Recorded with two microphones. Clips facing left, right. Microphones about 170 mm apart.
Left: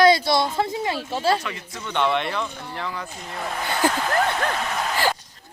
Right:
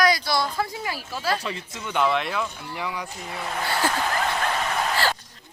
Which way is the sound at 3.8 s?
15° left (ahead or behind).